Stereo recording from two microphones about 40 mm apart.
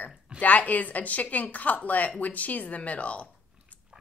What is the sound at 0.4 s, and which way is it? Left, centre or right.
A woman's voice, left.